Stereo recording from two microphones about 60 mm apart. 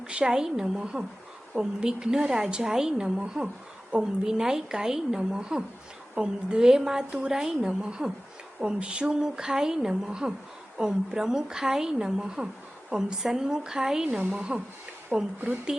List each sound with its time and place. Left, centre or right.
0.0 s a woman's voice: centre
15.1 s speech: right